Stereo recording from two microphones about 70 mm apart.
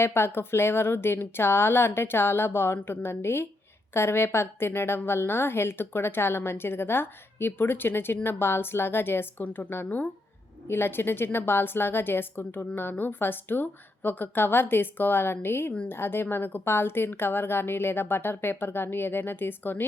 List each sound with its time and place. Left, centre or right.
0.0 s a woman's voice: left